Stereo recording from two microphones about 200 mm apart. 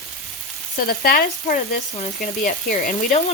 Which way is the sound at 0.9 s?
45° left (ahead or behind).